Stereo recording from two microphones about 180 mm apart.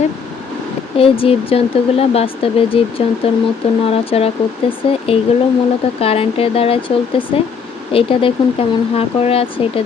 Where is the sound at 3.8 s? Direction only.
35° left (ahead or behind).